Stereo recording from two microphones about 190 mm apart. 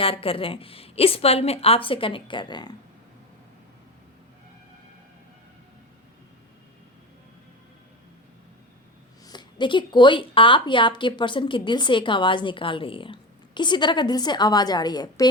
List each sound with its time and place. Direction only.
0.0 s speech: 30° left (ahead or behind)
9.2 s speech: 25° left (ahead or behind)